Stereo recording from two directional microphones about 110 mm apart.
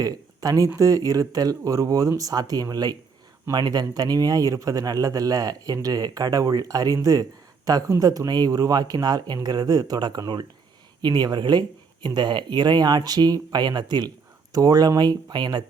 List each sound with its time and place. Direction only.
0.0 s a man's voice: 35° right (ahead or behind)